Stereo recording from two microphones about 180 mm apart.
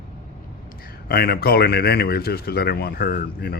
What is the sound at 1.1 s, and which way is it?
Speech, 55° left (ahead or behind).